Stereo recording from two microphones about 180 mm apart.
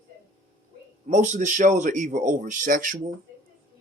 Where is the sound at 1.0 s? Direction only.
45° right (ahead or behind).